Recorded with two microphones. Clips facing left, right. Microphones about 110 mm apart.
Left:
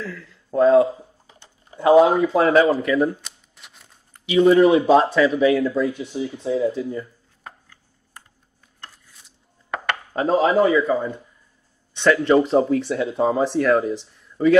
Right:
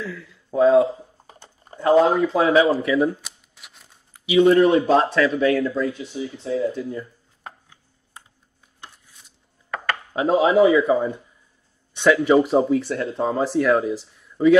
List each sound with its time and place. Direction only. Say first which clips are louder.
0.0 s speech: right 1 dB; 5° right (ahead or behind)
1.2 s typing: right 4 dB; 50° right (ahead or behind)
1.8 s speech: left 2 dB; 5° left (ahead or behind)
10.1 s speech: right 1 dB; centre (ahead or behind)